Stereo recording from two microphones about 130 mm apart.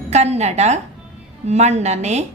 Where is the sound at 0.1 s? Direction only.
60° right (ahead or behind).